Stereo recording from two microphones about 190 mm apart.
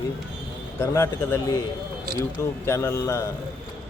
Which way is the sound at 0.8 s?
15° left (ahead or behind).